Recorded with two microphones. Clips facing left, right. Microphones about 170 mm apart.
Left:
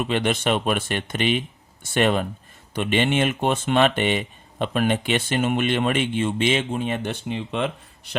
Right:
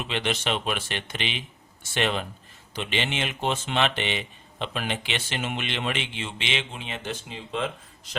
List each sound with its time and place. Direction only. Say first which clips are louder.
0.0 s speech: left 6 dB; 50° left (ahead or behind); by 8.1 s 65° left (ahead or behind)